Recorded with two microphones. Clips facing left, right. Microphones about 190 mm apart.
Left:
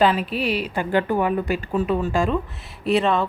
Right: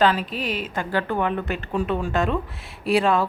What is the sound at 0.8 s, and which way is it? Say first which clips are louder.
A woman's voice: left 3 dB; 15° left (ahead or behind).